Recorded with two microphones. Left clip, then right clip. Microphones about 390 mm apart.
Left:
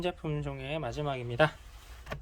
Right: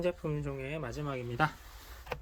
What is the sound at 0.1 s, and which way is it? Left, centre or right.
Speech, centre.